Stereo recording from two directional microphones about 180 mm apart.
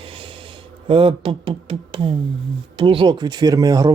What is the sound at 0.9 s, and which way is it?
Speech, 30° right (ahead or behind).